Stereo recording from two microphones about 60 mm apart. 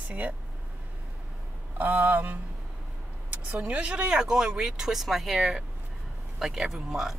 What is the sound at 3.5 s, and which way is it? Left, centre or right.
Speech, right.